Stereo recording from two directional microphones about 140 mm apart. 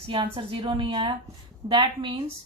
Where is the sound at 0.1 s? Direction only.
40° right (ahead or behind).